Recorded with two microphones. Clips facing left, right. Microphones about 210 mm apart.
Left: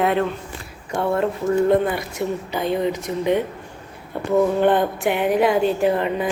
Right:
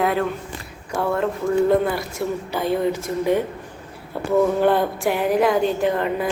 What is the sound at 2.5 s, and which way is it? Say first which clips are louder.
Speech: even; 15° left (ahead or behind).